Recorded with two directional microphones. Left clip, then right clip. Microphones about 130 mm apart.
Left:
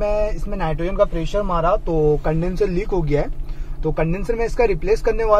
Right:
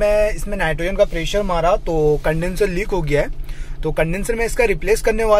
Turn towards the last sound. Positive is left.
turn(degrees=-20)  # may be behind; listen again after turning